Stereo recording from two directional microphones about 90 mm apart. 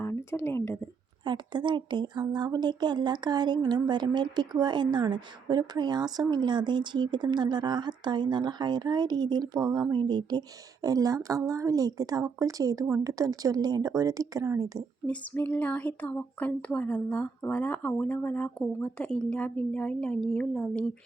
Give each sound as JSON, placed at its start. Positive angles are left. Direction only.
{"t": 0.0, "sound": "speech", "side_deg": 30}
{"t": 1.2, "sound": "speech", "side_deg": -60}
{"t": 2.2, "sound": "a woman's voice", "side_deg": -50}
{"t": 15.0, "sound": "speech", "side_deg": 20}